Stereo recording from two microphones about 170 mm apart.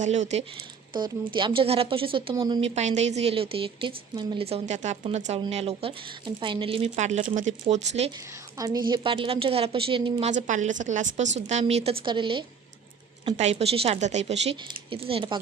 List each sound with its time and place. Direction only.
0.0 s speech: 45° right (ahead or behind)
0.9 s speech: 25° right (ahead or behind)
8.1 s a woman's voice: 20° right (ahead or behind)
13.2 s speech: 40° right (ahead or behind)